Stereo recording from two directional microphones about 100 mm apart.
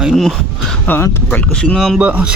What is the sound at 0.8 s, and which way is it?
Speech, 20° left (ahead or behind).